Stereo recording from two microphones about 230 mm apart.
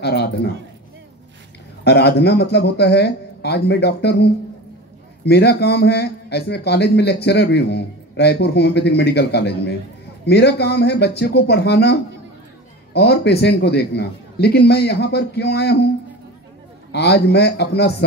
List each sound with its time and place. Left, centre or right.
0.0 s speech: left
1.9 s speech: left
16.9 s speech: left